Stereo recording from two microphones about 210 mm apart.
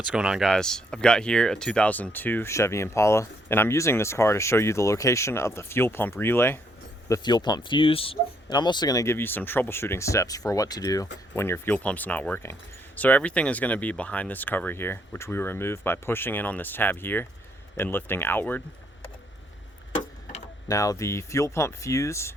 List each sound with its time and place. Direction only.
0.0 s speech: 5° right (ahead or behind)
20.7 s speech: 15° left (ahead or behind)